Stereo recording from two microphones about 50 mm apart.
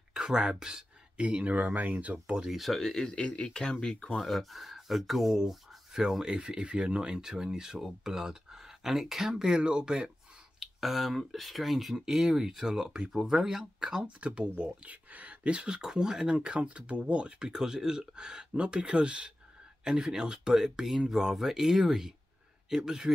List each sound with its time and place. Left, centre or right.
0.1 s a sound: centre
1.2 s speech: right
2.2 s speech: centre
2.5 s speech: centre
4.2 s speech: centre
10.6 s speech: centre